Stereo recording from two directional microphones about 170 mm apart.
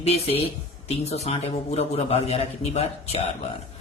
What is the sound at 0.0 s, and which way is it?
Speech, 35° left (ahead or behind).